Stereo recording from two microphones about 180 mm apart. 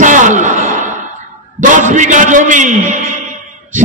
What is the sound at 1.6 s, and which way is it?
A man's voice, 45° right (ahead or behind).